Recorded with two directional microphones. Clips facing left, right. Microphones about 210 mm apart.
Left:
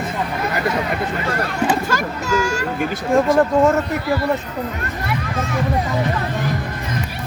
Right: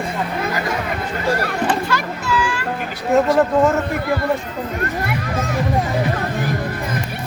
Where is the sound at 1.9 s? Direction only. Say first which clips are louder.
Left 1 dB; 45° left (ahead or behind).